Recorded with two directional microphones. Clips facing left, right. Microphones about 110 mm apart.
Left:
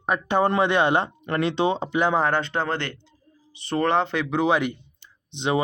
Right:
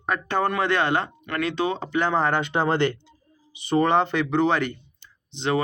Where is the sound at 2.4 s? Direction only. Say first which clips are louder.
Right 5 dB; 15° right (ahead or behind).